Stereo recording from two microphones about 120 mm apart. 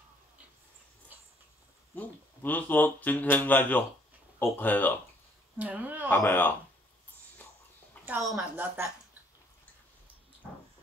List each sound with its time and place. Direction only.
2.0 s speech: 15° left (ahead or behind)
5.6 s speech: 15° right (ahead or behind)
6.0 s speech: 15° left (ahead or behind)
8.0 s a sound: 10° left (ahead or behind)
8.4 s speech: 20° right (ahead or behind)